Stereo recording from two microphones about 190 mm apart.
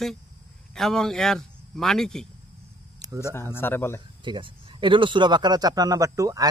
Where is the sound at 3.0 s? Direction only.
20° right (ahead or behind).